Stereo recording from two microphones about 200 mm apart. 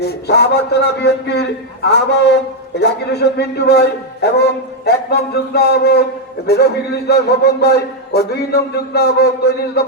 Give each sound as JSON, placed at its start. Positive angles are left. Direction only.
{"t": 0.0, "sound": "a man's voice", "side_deg": 55}